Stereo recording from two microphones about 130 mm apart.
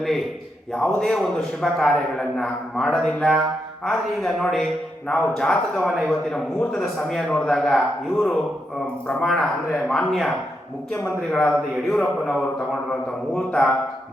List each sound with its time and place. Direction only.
0.0 s a man's voice: centre (ahead or behind)